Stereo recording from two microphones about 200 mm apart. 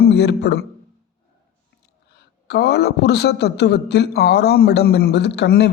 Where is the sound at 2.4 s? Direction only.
55° left (ahead or behind).